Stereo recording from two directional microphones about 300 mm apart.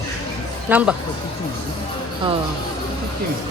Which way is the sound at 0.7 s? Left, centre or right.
Centre.